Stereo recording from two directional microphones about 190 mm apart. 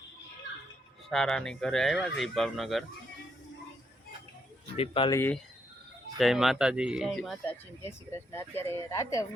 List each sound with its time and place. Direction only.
1.1 s speech: centre (ahead or behind)
4.8 s speech: 25° left (ahead or behind)
5.1 s speech: 10° left (ahead or behind)
6.1 s speech: centre (ahead or behind); by 9.2 s 15° left (ahead or behind)